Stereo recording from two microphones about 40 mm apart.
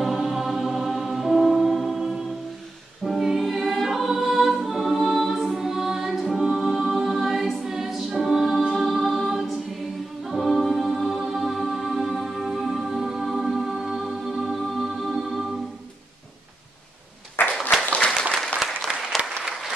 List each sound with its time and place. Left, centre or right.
0.0 s music: centre
8.7 s a capella: centre
10.7 s music: centre
17.4 s applause: left
17.8 s applause: left
18.6 s applause: centre